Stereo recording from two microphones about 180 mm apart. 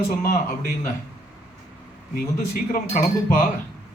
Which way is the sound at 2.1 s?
50° left (ahead or behind).